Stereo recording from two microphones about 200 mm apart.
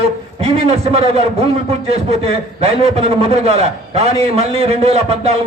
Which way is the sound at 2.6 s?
30° right (ahead or behind).